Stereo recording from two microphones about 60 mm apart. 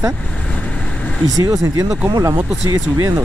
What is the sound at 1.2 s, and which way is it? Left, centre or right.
Speech, right.